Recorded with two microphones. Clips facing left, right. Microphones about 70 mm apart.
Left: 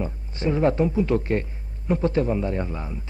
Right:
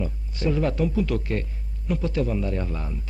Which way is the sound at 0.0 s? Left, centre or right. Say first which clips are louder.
Left 1 dB; left.